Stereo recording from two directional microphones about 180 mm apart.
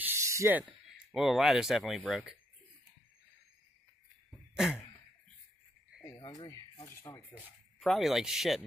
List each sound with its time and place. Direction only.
0.0 s spray: 15° right (ahead or behind)
1.1 s speech: centre (ahead or behind)
4.6 s a sound: centre (ahead or behind)
6.1 s speech: 25° left (ahead or behind)
7.8 s speech: centre (ahead or behind)